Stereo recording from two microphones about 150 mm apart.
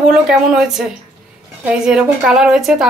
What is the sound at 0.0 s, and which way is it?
Speech, 5° right (ahead or behind).